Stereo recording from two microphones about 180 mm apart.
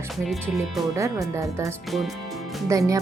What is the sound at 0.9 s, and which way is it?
Speech, 15° right (ahead or behind).